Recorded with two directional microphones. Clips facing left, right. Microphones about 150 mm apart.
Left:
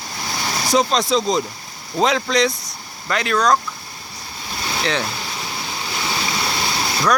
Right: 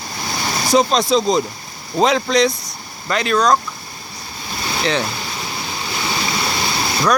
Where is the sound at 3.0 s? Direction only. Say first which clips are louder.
Right 2 dB; 25° right (ahead or behind).